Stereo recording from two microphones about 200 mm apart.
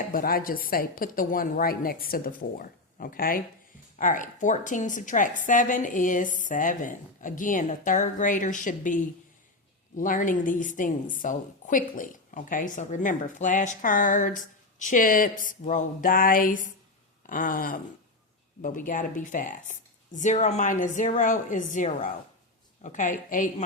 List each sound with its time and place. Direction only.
0.1 s a woman's voice: 45° left (ahead or behind)
10.0 s a woman's voice: 40° left (ahead or behind)